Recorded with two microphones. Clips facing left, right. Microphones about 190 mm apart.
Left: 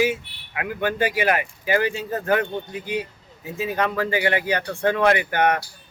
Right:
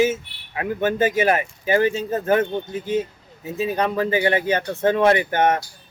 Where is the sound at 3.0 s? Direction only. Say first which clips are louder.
Right 4 dB; 20° right (ahead or behind).